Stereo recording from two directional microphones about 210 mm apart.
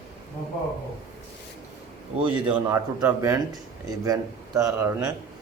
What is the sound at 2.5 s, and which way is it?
A man's voice, 5° right (ahead or behind).